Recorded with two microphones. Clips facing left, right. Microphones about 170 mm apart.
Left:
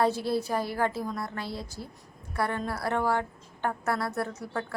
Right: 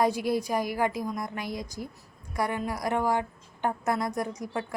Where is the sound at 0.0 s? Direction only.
15° right (ahead or behind).